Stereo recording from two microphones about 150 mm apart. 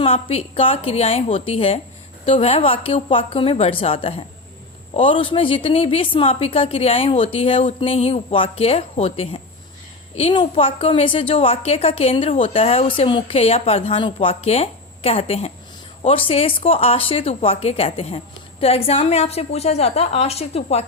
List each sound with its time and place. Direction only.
0.0 s a woman's voice: 40° left (ahead or behind)